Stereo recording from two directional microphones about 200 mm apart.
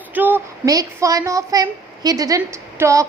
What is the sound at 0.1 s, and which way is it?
A woman's voice, 10° right (ahead or behind).